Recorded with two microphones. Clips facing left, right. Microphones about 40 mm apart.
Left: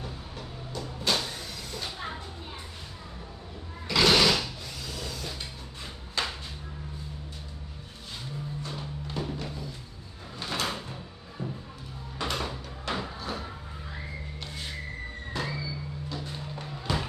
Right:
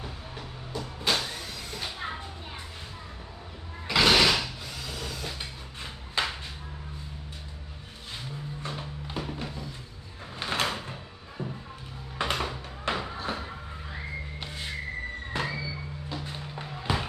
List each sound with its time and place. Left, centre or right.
0.0 s vehicle: centre
3.8 s a sound: centre
8.8 s music: centre
10.3 s drawer open or close: right
10.7 s door: centre
11.4 s music: right
15.3 s a sound: right
16.0 s music: centre